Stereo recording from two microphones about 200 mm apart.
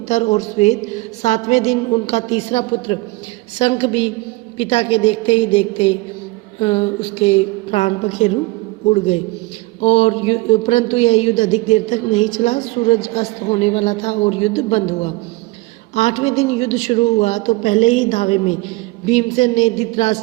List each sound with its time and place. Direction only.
0.1 s a woman's voice: 35° left (ahead or behind)
9.8 s speech: 30° left (ahead or behind)